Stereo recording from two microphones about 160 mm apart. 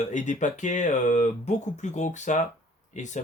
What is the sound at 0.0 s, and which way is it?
Speech, 50° left (ahead or behind).